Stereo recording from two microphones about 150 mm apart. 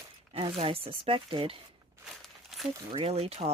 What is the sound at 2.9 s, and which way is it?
Speech, 40° right (ahead or behind).